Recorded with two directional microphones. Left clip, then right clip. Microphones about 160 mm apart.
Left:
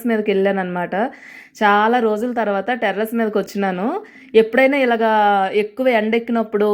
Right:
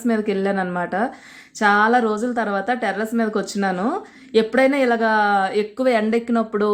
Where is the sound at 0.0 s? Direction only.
20° left (ahead or behind).